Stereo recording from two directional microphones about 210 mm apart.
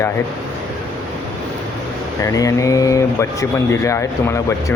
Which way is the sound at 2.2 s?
15° left (ahead or behind).